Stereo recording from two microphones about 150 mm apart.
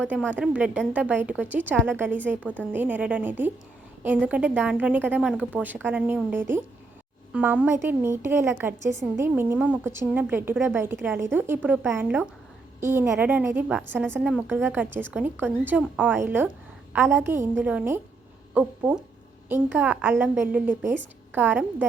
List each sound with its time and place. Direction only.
0.3 s a woman's voice: 10° right (ahead or behind)